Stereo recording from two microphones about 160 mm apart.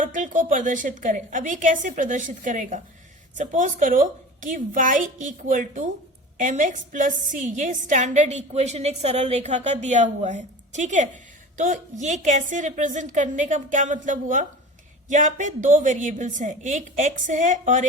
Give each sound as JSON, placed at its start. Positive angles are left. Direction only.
{"t": 0.0, "sound": "a woman's voice", "side_deg": -55}